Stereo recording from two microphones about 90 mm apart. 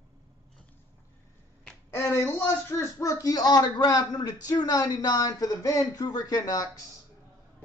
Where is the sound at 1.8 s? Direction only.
25° left (ahead or behind).